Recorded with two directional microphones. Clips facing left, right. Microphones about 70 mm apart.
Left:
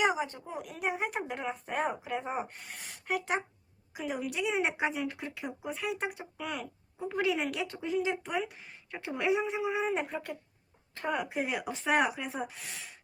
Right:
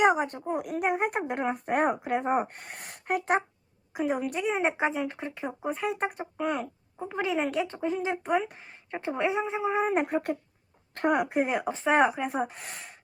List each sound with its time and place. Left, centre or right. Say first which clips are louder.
0.2 s speech: right 6 dB; right
7.1 s speech: right 2 dB; right